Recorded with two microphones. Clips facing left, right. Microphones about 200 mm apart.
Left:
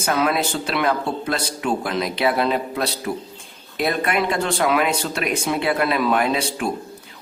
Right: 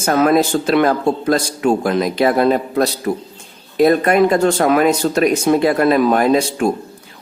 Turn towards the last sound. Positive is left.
turn(degrees=-45)  # may be behind; listen again after turning